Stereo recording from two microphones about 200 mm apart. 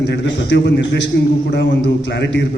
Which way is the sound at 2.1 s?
60° left (ahead or behind).